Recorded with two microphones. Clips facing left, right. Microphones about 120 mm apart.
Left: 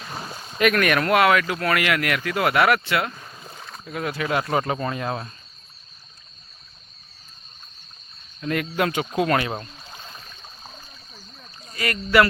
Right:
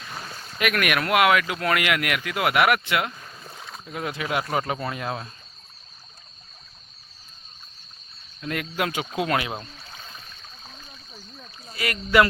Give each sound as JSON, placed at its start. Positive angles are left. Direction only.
{"t": 0.1, "sound": "boat", "side_deg": 15}
{"t": 0.6, "sound": "speech", "side_deg": -5}
{"t": 3.1, "sound": "boat", "side_deg": 15}
{"t": 3.5, "sound": "boat", "side_deg": 0}
{"t": 3.8, "sound": "speech", "side_deg": -20}
{"t": 8.4, "sound": "speech", "side_deg": -5}
{"t": 11.7, "sound": "speech", "side_deg": -10}